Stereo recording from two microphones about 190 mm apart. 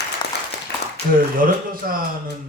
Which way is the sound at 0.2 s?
25° left (ahead or behind).